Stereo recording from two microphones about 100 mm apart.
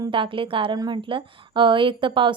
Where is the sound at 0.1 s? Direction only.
60° right (ahead or behind).